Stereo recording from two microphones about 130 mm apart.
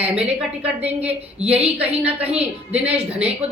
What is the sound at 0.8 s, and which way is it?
Speech, 50° right (ahead or behind).